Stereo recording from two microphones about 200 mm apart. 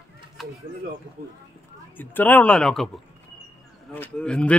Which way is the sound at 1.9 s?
10° left (ahead or behind).